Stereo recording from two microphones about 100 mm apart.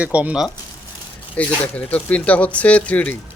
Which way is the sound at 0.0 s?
15° right (ahead or behind).